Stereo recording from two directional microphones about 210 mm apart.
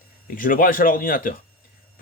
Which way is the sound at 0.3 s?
40° left (ahead or behind).